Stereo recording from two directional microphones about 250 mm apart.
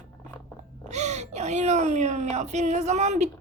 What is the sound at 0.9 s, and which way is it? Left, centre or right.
Speech, right.